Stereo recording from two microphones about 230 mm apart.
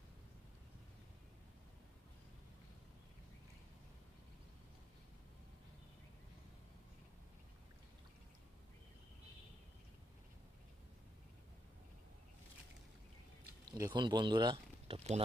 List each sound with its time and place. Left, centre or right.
13.7 s speech: centre